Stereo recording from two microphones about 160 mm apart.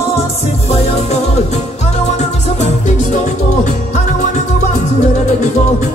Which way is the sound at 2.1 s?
45° left (ahead or behind).